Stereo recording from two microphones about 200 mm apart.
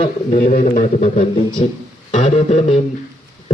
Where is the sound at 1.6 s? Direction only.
40° left (ahead or behind).